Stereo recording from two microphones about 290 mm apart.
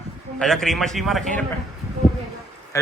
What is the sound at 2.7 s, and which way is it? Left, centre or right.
Speech, centre.